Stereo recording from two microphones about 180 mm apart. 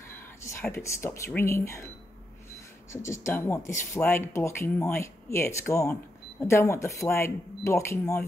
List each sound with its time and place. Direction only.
0.4 s speech: 15° left (ahead or behind)
2.9 s speech: 15° left (ahead or behind)